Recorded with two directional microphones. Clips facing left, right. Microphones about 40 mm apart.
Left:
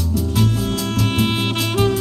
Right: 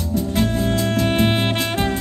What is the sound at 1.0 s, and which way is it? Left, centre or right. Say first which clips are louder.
Music: right 1 dB; centre.